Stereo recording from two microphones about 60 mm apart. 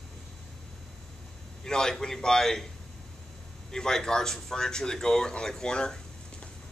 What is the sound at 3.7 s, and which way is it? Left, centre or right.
Speech, centre.